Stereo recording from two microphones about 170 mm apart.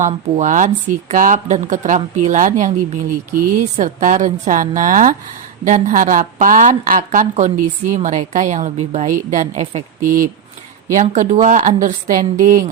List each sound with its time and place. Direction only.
0.3 s a woman's voice: 45° right (ahead or behind)